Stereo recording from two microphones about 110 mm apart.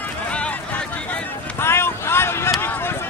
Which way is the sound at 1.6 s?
20° left (ahead or behind).